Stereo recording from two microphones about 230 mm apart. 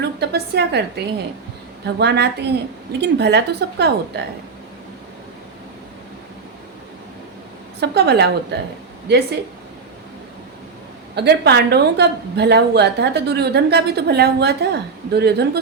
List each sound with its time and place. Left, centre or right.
0.2 s a woman's voice: right
2.0 s a woman's voice: right
7.8 s a woman's voice: right
11.1 s a woman's voice: right